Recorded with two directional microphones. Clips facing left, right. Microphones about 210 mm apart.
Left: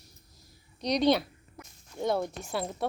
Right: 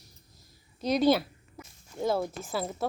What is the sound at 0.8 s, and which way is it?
Speech, 5° right (ahead or behind).